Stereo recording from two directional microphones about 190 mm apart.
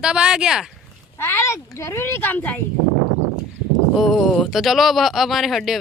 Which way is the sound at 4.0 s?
Centre (ahead or behind).